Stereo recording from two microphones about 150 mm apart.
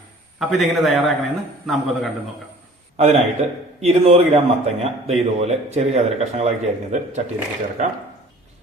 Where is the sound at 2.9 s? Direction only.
45° right (ahead or behind).